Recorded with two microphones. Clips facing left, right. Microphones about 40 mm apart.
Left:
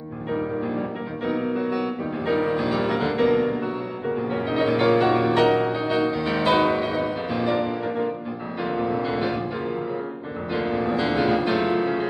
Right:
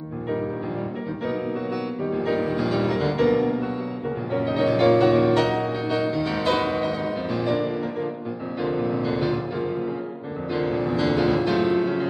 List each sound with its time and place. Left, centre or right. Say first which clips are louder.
0.3 s music: left 2 dB; centre